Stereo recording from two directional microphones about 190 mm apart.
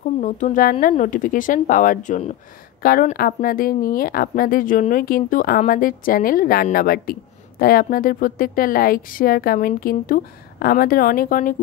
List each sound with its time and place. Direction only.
0.0 s a woman's voice: 40° left (ahead or behind)